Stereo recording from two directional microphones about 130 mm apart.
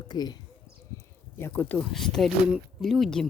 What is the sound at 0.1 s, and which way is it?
Speech, 30° left (ahead or behind).